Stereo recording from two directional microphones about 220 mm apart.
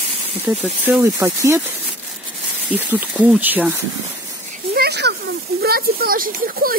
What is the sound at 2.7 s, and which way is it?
Speech, 10° right (ahead or behind).